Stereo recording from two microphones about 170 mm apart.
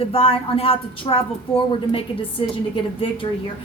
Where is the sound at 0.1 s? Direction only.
35° left (ahead or behind).